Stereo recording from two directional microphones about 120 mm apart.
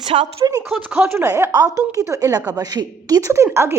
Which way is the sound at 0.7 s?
10° right (ahead or behind).